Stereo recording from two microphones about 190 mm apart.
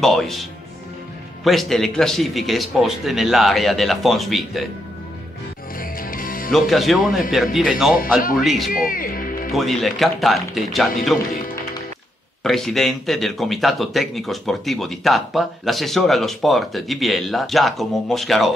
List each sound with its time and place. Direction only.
0.0 s speech: centre (ahead or behind)
5.8 s music: 50° left (ahead or behind)
6.5 s speech: centre (ahead or behind)
8.2 s speech: 45° left (ahead or behind)
9.5 s speech: centre (ahead or behind)
12.4 s speech: centre (ahead or behind)